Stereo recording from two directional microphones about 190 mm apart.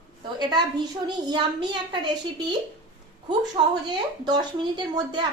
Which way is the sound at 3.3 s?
20° right (ahead or behind).